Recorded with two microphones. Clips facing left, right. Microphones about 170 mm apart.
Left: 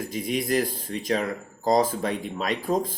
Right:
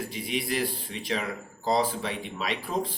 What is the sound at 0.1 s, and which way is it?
Speech, 45° left (ahead or behind).